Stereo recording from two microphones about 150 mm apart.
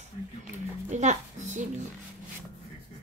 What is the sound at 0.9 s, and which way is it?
Speech, 50° right (ahead or behind).